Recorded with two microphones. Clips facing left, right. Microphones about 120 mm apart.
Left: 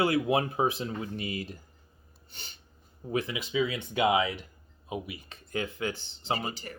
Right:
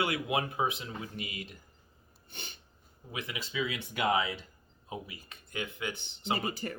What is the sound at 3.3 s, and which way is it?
Speech, 20° left (ahead or behind).